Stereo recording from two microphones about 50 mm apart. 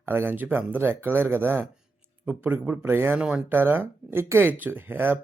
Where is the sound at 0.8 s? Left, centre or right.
Right.